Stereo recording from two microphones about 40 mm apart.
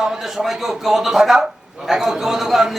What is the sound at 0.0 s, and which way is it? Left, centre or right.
A man's voice, centre.